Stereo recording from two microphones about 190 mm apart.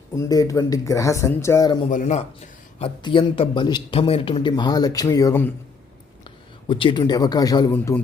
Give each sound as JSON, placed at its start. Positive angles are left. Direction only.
{"t": 0.2, "sound": "speech", "side_deg": 20}
{"t": 1.9, "sound": "speech", "side_deg": 40}
{"t": 2.7, "sound": "a man's voice", "side_deg": 30}
{"t": 6.7, "sound": "a man's voice", "side_deg": 25}